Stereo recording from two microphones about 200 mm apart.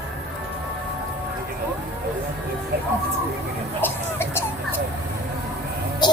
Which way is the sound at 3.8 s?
10° left (ahead or behind).